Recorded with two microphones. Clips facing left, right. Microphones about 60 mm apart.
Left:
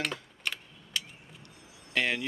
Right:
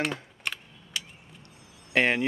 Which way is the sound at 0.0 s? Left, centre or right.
Centre.